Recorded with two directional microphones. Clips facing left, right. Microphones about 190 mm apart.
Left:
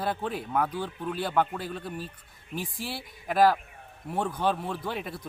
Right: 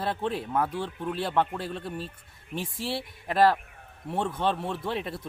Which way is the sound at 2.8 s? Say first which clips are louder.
Right 4 dB; 25° right (ahead or behind).